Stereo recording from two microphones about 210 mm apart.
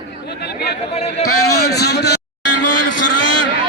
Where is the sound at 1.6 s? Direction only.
50° left (ahead or behind).